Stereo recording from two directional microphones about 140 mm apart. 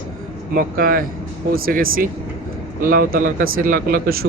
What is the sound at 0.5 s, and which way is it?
A man's voice, 90° right.